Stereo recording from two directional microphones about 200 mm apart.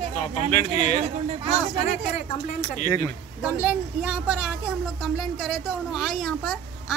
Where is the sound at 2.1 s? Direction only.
35° left (ahead or behind).